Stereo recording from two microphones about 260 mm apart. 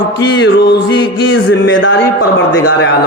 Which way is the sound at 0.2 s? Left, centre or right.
Left.